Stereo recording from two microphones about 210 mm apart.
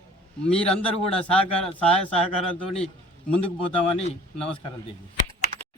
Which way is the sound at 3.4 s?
25° left (ahead or behind).